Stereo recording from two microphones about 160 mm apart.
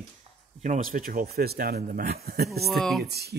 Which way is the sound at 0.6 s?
55° right (ahead or behind).